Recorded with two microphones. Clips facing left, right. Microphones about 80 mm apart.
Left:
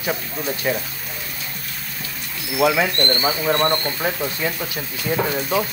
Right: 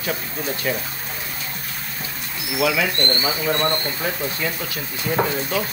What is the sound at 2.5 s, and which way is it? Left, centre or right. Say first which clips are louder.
Speech: left 3 dB; left.